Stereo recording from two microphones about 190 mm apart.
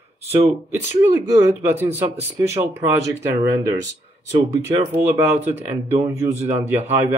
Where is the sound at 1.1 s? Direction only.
10° right (ahead or behind).